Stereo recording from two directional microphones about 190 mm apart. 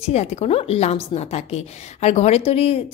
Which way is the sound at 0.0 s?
35° left (ahead or behind).